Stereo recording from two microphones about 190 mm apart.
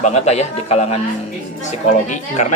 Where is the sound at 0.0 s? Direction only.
35° left (ahead or behind).